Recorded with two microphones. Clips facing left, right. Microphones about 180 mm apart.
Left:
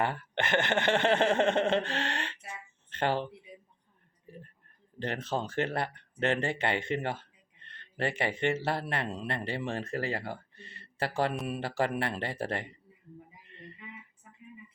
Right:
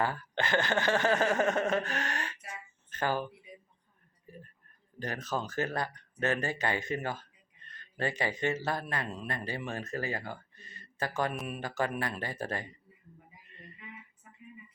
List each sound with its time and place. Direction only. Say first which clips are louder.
0.0 s speech: left 1 dB; 25° left (ahead or behind)
4.3 s a sound: left 1 dB; 25° left (ahead or behind)
4.9 s speech: left 2 dB; 25° left (ahead or behind)